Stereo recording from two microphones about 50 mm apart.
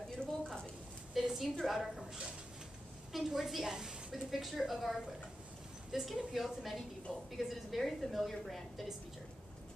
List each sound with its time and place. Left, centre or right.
0.2 s a sound: centre
1.2 s a woman's voice: centre
3.1 s a woman's voice: centre